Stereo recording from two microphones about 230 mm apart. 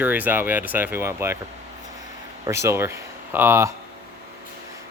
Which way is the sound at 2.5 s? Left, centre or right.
Centre.